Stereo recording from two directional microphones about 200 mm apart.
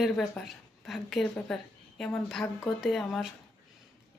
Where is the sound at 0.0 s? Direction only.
Centre (ahead or behind).